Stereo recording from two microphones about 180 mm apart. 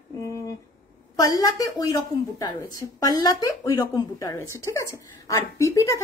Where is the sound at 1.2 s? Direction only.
20° left (ahead or behind).